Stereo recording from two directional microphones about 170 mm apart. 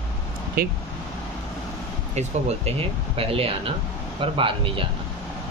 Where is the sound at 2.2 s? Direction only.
40° right (ahead or behind).